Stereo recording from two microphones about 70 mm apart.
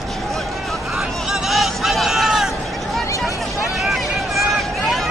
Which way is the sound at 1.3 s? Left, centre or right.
Centre.